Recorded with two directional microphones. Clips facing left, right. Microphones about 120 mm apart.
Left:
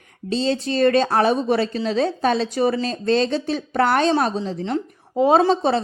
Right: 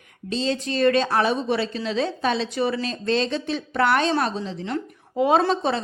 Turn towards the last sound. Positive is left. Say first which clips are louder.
# left 4 dB
turn(degrees=35)  # may be behind; listen again after turning